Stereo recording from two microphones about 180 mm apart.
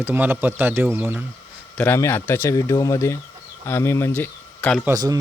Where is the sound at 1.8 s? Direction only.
15° left (ahead or behind).